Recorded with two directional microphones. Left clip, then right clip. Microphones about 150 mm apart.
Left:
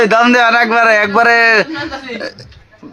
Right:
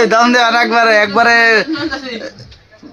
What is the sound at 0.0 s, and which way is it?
A man's voice, 20° left (ahead or behind).